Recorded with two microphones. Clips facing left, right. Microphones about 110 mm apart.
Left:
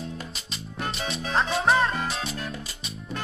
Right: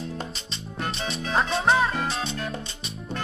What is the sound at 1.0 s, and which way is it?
Music, centre (ahead or behind).